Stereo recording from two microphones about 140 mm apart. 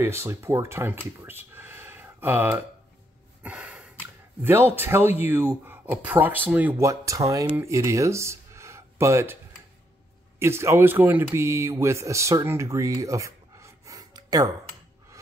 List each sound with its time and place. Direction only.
0.0 s speech: 20° right (ahead or behind)
3.4 s gasp: 10° right (ahead or behind)
5.2 s speech: 15° right (ahead or behind)
6.8 s speech: 20° right (ahead or behind)
7.4 s speech: 10° right (ahead or behind)
7.7 s speech: 20° right (ahead or behind)
10.4 s speech: 20° right (ahead or behind)